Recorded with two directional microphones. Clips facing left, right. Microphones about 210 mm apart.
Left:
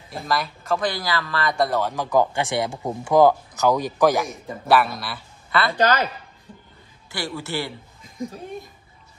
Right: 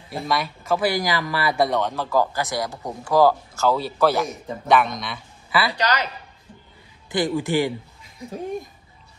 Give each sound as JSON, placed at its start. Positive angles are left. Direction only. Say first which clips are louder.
{"t": 0.1, "sound": "speech", "louder": "right 1 dB", "side_deg": 0}
{"t": 5.8, "sound": "speech", "louder": "left 4 dB", "side_deg": 50}
{"t": 7.1, "sound": "a man's voice", "louder": "right 8 dB", "side_deg": -15}